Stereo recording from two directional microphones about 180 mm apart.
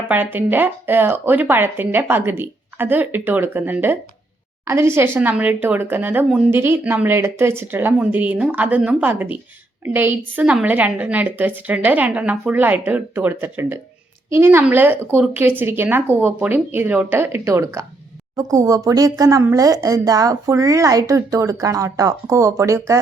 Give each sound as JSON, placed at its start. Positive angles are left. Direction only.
{"t": 0.1, "sound": "speech", "side_deg": -10}